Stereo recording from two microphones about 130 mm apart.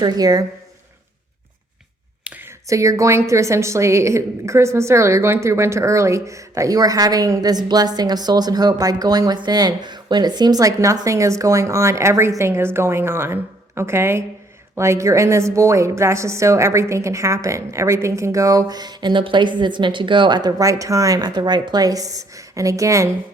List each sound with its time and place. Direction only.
0.0 s a woman's voice: 30° right (ahead or behind)
2.2 s a sound: 10° right (ahead or behind)
2.6 s a woman's voice: 25° right (ahead or behind)